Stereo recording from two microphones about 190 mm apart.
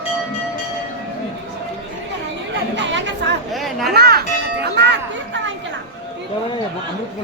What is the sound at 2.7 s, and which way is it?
Chatter, 65° right (ahead or behind).